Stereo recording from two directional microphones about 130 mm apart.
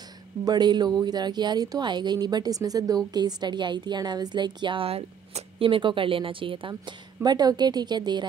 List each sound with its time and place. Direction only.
0.5 s a woman's voice: 35° right (ahead or behind)